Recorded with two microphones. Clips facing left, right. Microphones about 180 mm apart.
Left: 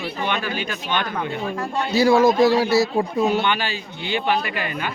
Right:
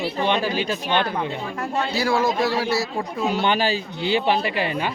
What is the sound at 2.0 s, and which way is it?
Speech, 20° left (ahead or behind).